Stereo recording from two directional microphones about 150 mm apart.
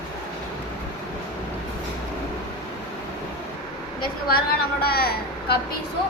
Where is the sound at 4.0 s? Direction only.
85° left.